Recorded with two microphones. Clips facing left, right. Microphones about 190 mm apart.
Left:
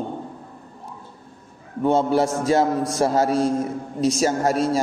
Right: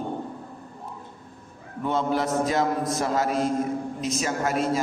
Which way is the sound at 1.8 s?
30° left (ahead or behind).